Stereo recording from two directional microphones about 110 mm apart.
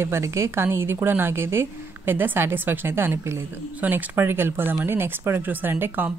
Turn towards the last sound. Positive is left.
turn(degrees=-20)  # may be behind; listen again after turning